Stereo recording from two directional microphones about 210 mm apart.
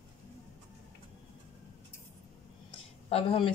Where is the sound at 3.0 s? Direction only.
25° left (ahead or behind).